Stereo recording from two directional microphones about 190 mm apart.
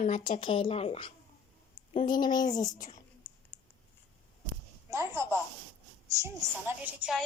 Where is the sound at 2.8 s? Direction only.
45° left (ahead or behind).